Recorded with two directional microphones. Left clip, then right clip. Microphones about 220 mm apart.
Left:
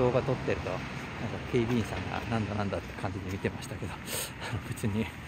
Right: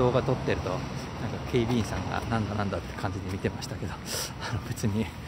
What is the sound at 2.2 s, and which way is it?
Speech, 15° left (ahead or behind).